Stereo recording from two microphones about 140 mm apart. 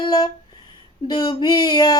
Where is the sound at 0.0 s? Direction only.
30° left (ahead or behind).